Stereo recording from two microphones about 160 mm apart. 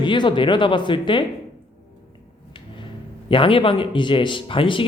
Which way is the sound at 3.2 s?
35° left (ahead or behind).